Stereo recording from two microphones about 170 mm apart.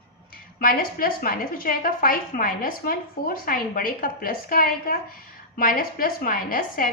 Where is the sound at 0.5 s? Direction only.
60° left (ahead or behind).